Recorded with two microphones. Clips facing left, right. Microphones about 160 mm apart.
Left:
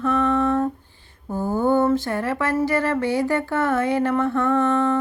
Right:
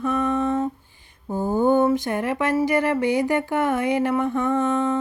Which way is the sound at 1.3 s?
15° right (ahead or behind).